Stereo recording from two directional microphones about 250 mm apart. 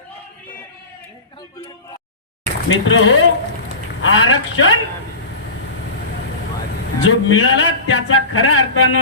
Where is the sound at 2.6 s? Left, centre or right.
Left.